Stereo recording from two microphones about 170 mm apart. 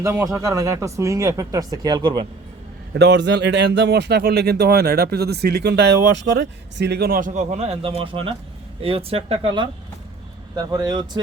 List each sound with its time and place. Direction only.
0.0 s speech: 15° right (ahead or behind)
2.9 s speech: 90° right; by 9.6 s 35° right (ahead or behind)
10.5 s speech: 25° right (ahead or behind)